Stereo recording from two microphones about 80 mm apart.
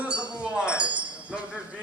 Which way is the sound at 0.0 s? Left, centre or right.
Centre.